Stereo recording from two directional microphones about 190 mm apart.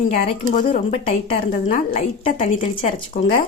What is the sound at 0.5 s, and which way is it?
Speech, 40° left (ahead or behind).